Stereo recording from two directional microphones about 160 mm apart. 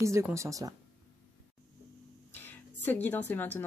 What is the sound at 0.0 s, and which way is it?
Speech, 20° right (ahead or behind).